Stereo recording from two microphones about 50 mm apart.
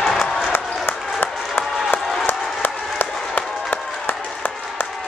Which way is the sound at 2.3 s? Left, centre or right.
Left.